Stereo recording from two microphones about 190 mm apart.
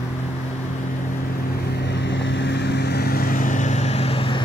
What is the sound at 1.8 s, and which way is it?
Vehicle, 70° left (ahead or behind).